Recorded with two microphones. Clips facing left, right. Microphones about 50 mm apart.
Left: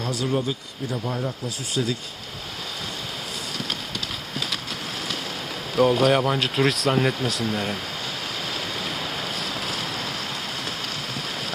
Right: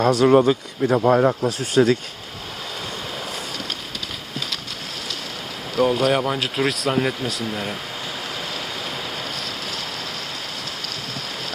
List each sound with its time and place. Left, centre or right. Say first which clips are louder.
0.0 s speech: right 11 dB; right
0.3 s speech: right 11 dB; right
1.5 s speech: right 9 dB; right
5.7 s speech: even; centre